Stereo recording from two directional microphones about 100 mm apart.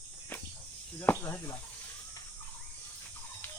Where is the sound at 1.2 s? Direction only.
25° left (ahead or behind).